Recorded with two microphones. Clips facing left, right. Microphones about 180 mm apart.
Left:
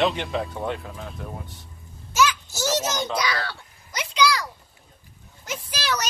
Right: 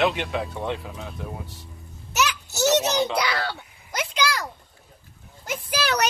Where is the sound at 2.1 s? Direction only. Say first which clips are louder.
Left 3 dB; 70° right (ahead or behind).